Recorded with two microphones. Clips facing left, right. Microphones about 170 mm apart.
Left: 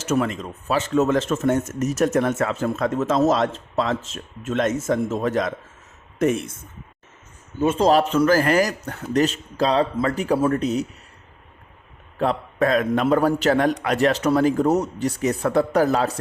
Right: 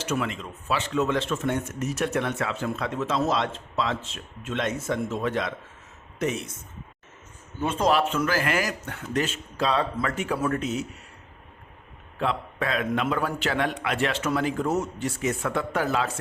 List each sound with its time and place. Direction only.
0.0 s speech: 45° left (ahead or behind)
7.6 s a man's voice: 35° left (ahead or behind)
12.2 s a man's voice: 40° left (ahead or behind)